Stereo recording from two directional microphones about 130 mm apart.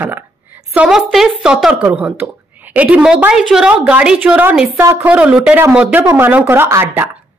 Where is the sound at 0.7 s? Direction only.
5° right (ahead or behind).